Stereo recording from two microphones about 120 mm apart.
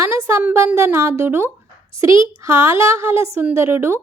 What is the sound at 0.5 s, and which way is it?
A woman's voice, 20° right (ahead or behind).